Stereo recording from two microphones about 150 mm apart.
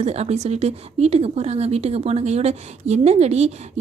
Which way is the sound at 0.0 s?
45° right (ahead or behind).